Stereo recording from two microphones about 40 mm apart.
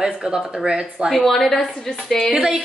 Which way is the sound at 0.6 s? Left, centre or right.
Centre.